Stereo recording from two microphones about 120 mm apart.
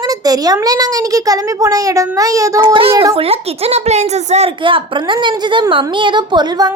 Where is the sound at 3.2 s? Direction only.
55° right (ahead or behind).